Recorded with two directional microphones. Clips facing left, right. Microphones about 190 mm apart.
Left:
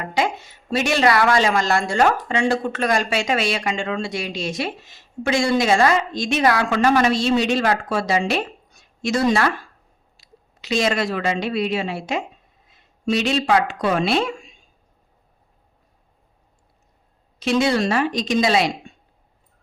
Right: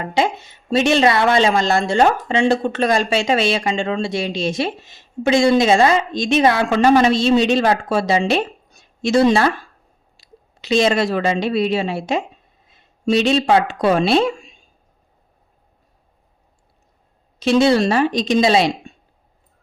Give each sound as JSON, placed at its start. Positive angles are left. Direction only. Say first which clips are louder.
{"t": 0.0, "sound": "a woman's voice", "louder": "right 3 dB", "side_deg": -25}
{"t": 17.4, "sound": "a woman's voice", "louder": "right 5 dB", "side_deg": -30}